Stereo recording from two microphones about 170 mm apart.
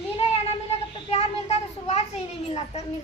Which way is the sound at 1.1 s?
40° left (ahead or behind).